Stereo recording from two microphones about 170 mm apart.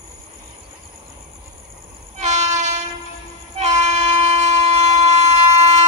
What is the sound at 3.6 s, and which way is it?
Train, 40° right (ahead or behind).